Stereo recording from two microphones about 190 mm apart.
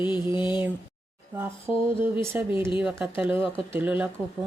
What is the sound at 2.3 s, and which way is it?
Speech, 10° right (ahead or behind).